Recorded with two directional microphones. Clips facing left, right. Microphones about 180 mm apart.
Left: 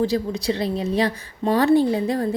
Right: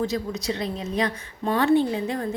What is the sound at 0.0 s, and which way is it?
A woman's voice, 30° left (ahead or behind).